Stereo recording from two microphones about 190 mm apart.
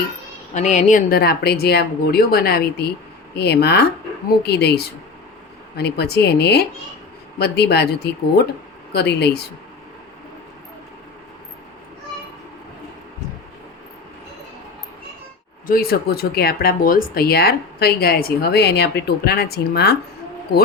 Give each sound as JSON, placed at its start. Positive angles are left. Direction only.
{"t": 0.5, "sound": "speech", "side_deg": 40}
{"t": 15.6, "sound": "speech", "side_deg": 50}